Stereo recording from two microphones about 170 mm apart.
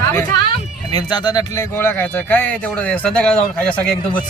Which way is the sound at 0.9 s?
25° left (ahead or behind).